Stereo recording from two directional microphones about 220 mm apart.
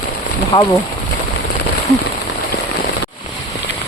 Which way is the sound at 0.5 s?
25° left (ahead or behind).